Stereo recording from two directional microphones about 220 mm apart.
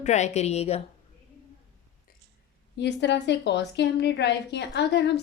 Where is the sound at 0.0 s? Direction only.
30° left (ahead or behind).